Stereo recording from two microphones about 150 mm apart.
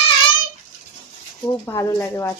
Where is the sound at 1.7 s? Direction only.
20° left (ahead or behind).